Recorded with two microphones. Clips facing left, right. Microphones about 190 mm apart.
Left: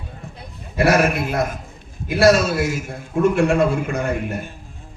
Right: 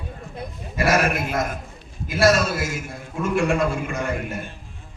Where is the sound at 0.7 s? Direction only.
65° left (ahead or behind).